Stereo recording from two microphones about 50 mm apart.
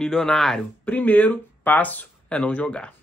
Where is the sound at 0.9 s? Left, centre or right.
Left.